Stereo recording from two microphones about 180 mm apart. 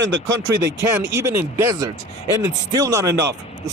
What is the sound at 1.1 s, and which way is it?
Speech, 15° right (ahead or behind).